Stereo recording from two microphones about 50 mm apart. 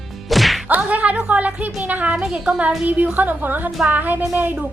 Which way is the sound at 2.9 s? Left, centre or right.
Right.